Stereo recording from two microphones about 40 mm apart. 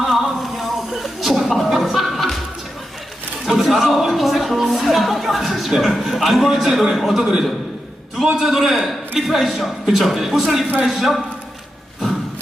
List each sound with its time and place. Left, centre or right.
0.0 s a sound: centre
3.4 s a man's voice: centre
7.2 s a man's voice: centre